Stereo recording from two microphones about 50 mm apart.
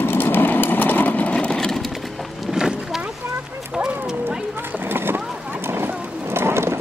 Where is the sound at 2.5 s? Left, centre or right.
Centre.